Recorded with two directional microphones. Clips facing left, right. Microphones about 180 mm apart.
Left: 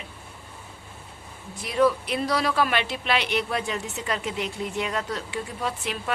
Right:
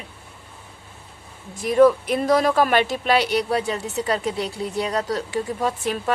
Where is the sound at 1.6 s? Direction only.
45° right (ahead or behind).